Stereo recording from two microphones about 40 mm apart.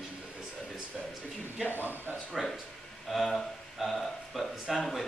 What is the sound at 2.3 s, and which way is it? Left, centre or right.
A man's voice, centre.